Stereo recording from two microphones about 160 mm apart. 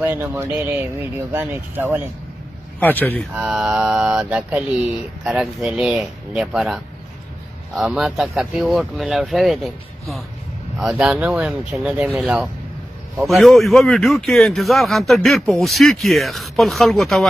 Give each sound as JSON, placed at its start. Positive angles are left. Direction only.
{"t": 0.0, "sound": "speech", "side_deg": -10}
{"t": 2.8, "sound": "speech", "side_deg": 10}
{"t": 3.3, "sound": "a man's voice", "side_deg": -5}